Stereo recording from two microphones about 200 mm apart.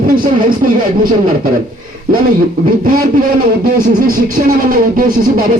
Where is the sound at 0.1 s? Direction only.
45° right (ahead or behind).